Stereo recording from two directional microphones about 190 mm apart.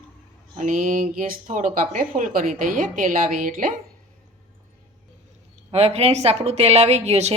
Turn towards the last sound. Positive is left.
turn(degrees=-35)  # may be behind; listen again after turning